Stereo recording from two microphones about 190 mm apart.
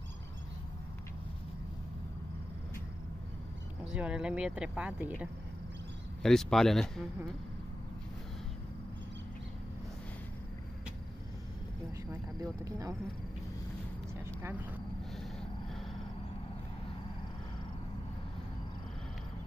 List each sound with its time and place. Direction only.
3.9 s speech: 5° right (ahead or behind)
12.1 s speech: 15° right (ahead or behind)
14.2 s vehicle: 10° right (ahead or behind)